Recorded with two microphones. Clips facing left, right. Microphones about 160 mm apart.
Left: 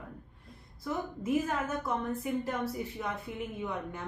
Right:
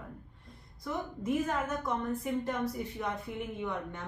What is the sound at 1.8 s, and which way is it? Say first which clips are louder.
A woman's voice: even; 5° left (ahead or behind).